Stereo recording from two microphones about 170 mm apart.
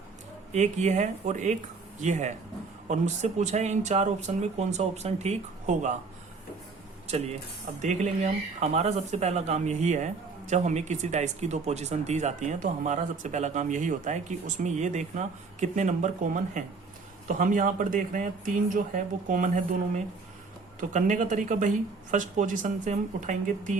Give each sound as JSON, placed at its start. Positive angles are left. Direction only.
{"t": 0.5, "sound": "speech", "side_deg": -40}
{"t": 7.8, "sound": "speech", "side_deg": -45}
{"t": 20.9, "sound": "speech", "side_deg": -45}